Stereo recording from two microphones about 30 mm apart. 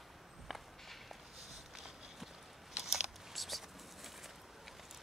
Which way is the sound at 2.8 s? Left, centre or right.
Centre.